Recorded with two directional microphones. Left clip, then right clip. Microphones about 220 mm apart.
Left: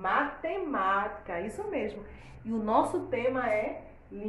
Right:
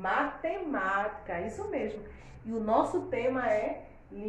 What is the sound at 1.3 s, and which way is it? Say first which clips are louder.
A woman's voice: even; 20° left (ahead or behind).